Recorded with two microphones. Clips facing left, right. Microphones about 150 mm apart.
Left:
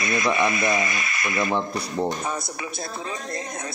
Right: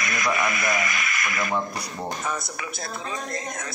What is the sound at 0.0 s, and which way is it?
Speech, 25° left (ahead or behind).